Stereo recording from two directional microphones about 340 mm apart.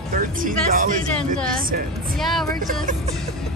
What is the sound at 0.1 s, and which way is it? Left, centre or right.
Speech, right.